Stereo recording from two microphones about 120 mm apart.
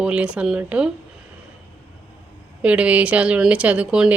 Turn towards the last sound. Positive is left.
turn(degrees=-10)  # may be behind; listen again after turning